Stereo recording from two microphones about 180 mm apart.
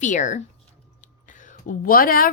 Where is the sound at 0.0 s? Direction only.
45° left (ahead or behind).